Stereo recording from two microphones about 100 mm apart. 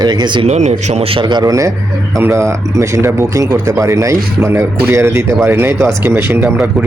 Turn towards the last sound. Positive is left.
turn(degrees=-20)  # may be behind; listen again after turning